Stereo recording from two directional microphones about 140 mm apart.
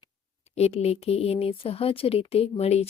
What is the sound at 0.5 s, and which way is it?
Speech, 50° left (ahead or behind).